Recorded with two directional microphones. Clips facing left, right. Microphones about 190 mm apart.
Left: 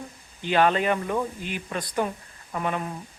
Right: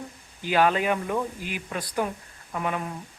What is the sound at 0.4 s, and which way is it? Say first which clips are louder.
Speech: left 1 dB; 5° right (ahead or behind).